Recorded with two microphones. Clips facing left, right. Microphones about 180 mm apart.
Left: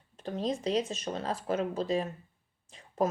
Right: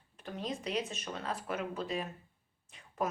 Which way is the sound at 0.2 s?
30° left (ahead or behind).